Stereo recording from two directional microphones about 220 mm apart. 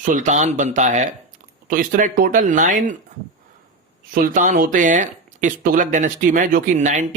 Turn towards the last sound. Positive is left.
turn(degrees=-35)  # may be behind; listen again after turning